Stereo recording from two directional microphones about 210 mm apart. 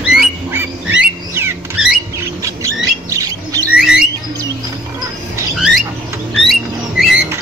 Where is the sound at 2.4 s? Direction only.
15° right (ahead or behind).